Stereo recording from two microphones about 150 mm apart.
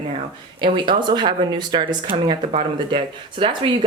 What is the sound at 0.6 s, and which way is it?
Speech, 30° right (ahead or behind).